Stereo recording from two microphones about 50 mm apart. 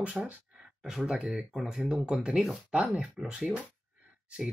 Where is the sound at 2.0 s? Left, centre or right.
Centre.